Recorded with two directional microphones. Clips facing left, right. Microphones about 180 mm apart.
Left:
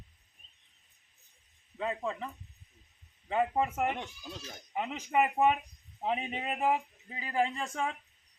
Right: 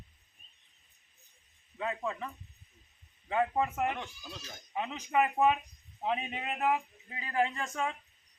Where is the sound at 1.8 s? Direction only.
25° left (ahead or behind).